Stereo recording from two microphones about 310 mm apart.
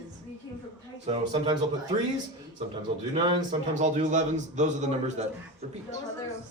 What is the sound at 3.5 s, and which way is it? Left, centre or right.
Speech, right.